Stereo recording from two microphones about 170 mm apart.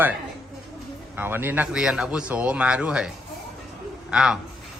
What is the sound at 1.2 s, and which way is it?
Speech, 10° right (ahead or behind).